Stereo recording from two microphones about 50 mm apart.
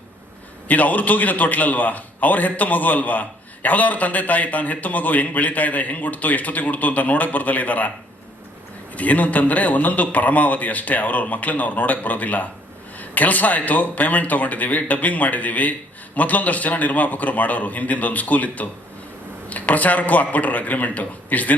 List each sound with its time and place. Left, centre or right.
0.7 s a man's voice: left
8.9 s a man's voice: left